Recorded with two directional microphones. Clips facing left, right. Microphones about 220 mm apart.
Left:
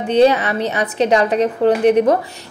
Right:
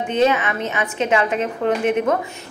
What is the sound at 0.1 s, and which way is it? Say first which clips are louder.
A woman's voice: left 6 dB; 35° left (ahead or behind).